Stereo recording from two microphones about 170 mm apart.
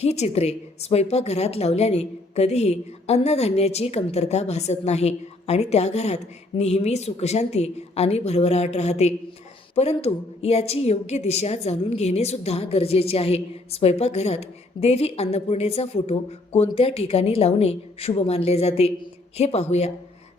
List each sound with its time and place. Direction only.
0.0 s a woman's voice: 40° left (ahead or behind)